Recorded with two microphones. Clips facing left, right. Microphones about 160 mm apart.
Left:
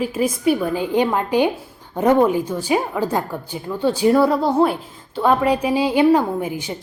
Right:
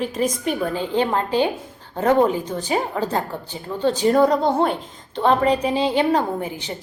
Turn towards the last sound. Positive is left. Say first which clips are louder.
# left 3 dB
turn(degrees=10)  # may be behind; listen again after turning